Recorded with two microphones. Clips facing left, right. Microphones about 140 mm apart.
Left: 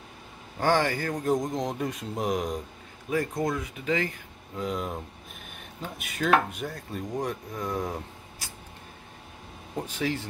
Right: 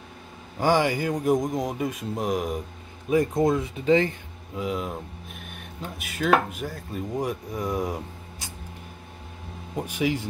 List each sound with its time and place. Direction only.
0.6 s speech: 10° right (ahead or behind)
3.1 s speech: 20° right (ahead or behind)
4.6 s speech: 5° right (ahead or behind)
5.9 s speech: centre (ahead or behind)
9.8 s speech: 15° right (ahead or behind)